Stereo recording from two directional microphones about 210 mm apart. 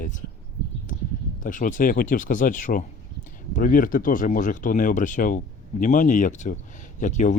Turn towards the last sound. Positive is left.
turn(degrees=35)  # may be behind; listen again after turning